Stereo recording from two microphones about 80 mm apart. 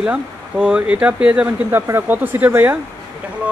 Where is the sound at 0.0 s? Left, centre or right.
Centre.